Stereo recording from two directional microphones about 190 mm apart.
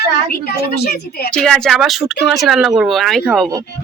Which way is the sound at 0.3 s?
55° left (ahead or behind).